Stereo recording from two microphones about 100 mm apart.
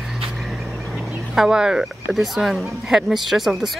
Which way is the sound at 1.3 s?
5° right (ahead or behind).